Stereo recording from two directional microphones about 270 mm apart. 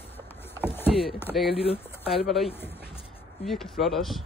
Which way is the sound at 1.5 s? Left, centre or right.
Left.